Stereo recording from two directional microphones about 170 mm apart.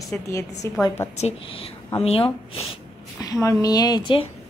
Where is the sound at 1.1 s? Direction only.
35° left (ahead or behind).